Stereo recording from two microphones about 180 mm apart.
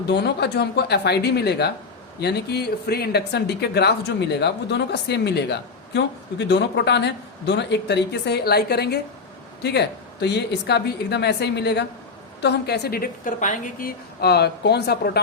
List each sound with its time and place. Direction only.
0.1 s speech: 65° left (ahead or behind)